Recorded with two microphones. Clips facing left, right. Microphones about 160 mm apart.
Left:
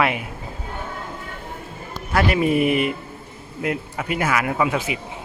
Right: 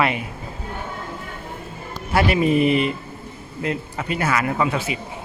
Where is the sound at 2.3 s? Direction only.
10° left (ahead or behind).